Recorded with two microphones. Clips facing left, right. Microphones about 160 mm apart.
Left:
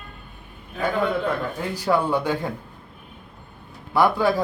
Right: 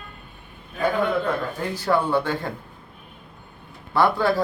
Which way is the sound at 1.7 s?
10° left (ahead or behind).